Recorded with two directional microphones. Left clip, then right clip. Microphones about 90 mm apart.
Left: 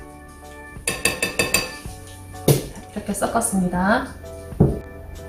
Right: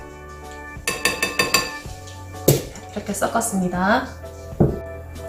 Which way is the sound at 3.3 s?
10° right (ahead or behind).